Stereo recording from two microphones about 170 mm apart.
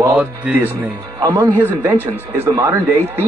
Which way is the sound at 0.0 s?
10° right (ahead or behind).